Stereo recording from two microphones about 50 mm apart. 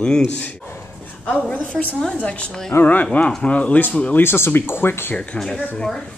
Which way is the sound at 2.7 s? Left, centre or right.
Left.